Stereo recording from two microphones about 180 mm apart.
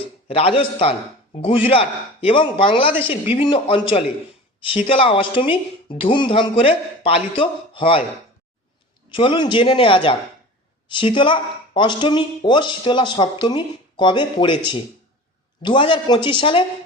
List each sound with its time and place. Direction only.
0.3 s a man's voice: 30° left (ahead or behind)
9.0 s speech: 30° left (ahead or behind)